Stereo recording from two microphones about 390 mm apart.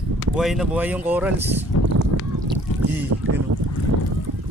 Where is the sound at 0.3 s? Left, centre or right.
Centre.